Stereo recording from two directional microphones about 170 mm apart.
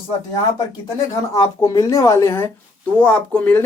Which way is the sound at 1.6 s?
20° left (ahead or behind).